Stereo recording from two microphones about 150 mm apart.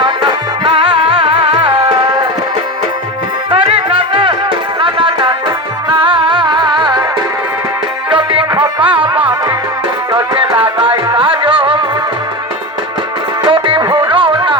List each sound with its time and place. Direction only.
0.0 s music: 35° right (ahead or behind)
3.5 s music: 40° right (ahead or behind)
8.1 s music: 35° right (ahead or behind)
13.4 s music: 35° right (ahead or behind)